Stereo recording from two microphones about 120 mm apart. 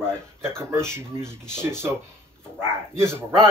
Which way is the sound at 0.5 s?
5° left (ahead or behind).